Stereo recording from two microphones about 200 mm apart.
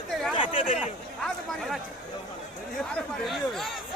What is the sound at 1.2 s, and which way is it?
Speech, centre (ahead or behind).